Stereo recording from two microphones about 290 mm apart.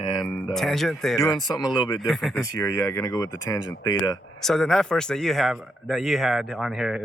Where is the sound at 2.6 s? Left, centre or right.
Centre.